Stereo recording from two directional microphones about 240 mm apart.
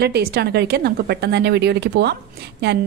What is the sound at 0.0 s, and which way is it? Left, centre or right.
A woman's voice, right.